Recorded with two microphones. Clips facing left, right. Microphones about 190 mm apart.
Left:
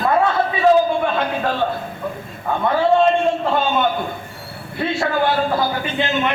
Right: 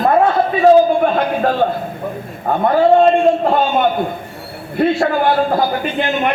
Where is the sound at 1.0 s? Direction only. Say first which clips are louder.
Right 5 dB; 45° right (ahead or behind).